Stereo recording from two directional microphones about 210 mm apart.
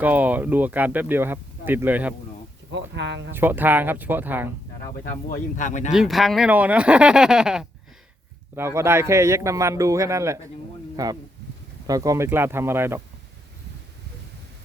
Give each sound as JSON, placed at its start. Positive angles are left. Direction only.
{"t": 0.0, "sound": "speech", "side_deg": -10}
{"t": 2.7, "sound": "speech", "side_deg": -60}
{"t": 3.3, "sound": "speech", "side_deg": -10}
{"t": 5.3, "sound": "speech", "side_deg": 35}
{"t": 5.9, "sound": "speech", "side_deg": 0}